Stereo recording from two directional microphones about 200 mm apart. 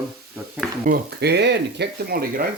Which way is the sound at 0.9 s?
55° right (ahead or behind).